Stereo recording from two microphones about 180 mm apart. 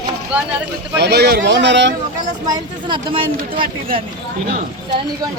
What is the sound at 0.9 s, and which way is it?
Speech, 65° right (ahead or behind).